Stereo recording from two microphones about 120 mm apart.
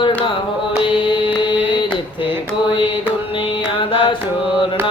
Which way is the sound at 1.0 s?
45° left (ahead or behind).